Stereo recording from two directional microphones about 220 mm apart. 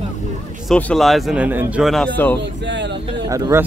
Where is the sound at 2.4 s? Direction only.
55° right (ahead or behind).